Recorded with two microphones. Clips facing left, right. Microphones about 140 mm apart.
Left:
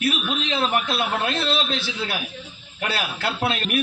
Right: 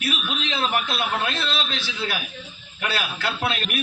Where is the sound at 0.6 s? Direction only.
30° left (ahead or behind).